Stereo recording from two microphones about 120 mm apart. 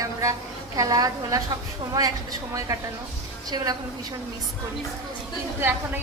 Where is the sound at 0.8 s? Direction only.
30° right (ahead or behind).